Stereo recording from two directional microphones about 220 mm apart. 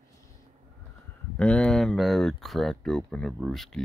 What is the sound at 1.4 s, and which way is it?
Speech, 5° left (ahead or behind).